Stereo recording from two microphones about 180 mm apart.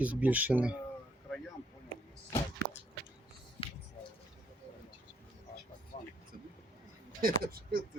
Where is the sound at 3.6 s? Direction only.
30° left (ahead or behind).